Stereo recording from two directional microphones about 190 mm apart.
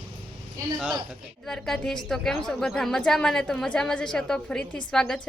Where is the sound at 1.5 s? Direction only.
Centre (ahead or behind).